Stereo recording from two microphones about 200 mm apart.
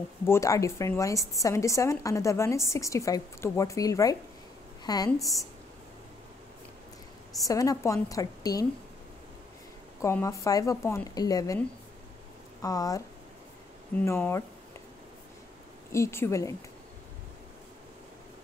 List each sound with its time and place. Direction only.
0.2 s a woman's voice: 15° left (ahead or behind)
7.4 s a woman's voice: 15° left (ahead or behind)
10.0 s a woman's voice: 15° left (ahead or behind)
12.6 s a woman's voice: 15° left (ahead or behind)
14.0 s a woman's voice: 15° left (ahead or behind)
15.9 s a woman's voice: 15° left (ahead or behind)